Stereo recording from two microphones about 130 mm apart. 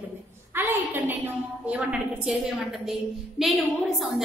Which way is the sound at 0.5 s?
15° right (ahead or behind).